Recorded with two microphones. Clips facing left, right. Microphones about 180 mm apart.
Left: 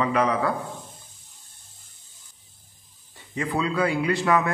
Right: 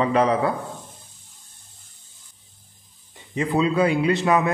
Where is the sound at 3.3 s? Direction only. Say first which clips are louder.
Right 5 dB; 20° right (ahead or behind).